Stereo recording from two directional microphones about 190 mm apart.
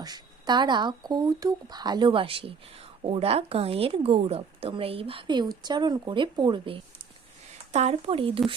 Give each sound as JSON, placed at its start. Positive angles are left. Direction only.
{"t": 0.0, "sound": "speech", "side_deg": -20}